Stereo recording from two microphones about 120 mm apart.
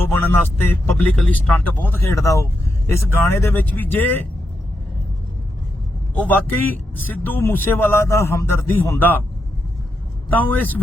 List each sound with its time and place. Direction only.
0.0 s speech: 15° left (ahead or behind)
6.1 s speech: 15° left (ahead or behind)
10.2 s speech: 15° left (ahead or behind)